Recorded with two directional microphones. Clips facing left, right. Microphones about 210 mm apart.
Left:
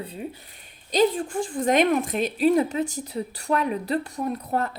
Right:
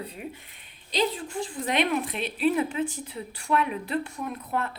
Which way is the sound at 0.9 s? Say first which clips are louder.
Left 6 dB; 50° left (ahead or behind).